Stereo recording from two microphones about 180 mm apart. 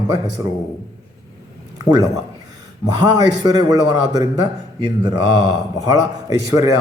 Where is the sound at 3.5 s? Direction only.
20° right (ahead or behind).